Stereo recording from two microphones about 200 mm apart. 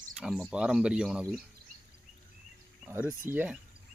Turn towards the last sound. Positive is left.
turn(degrees=-10)  # may be behind; listen again after turning